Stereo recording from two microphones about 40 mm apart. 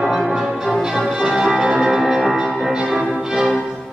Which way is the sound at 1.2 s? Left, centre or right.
Right.